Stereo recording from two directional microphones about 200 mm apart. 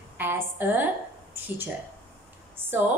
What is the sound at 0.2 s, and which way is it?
Speech, 10° right (ahead or behind).